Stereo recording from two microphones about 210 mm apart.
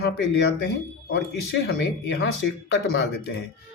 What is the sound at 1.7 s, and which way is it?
Speech, 55° left (ahead or behind).